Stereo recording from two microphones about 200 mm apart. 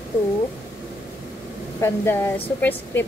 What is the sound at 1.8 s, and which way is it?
A woman's voice, 10° left (ahead or behind).